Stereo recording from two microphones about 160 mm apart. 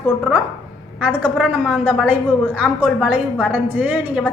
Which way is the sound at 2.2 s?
5° left (ahead or behind).